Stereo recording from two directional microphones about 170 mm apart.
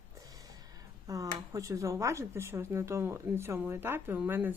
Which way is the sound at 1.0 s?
20° right (ahead or behind).